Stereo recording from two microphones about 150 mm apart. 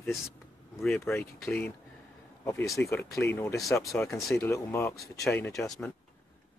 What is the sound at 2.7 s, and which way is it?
Speech, 20° left (ahead or behind).